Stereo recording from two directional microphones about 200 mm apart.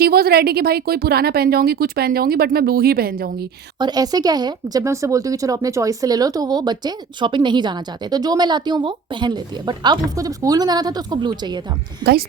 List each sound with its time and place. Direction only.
0.0 s speech: 50° right (ahead or behind)
3.8 s speech: 20° right (ahead or behind)